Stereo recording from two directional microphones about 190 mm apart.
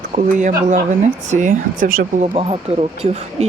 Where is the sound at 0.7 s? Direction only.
40° right (ahead or behind).